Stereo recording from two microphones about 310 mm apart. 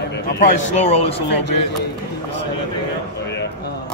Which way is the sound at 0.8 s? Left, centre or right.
Centre.